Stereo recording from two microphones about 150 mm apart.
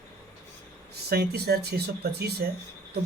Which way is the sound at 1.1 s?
90° right.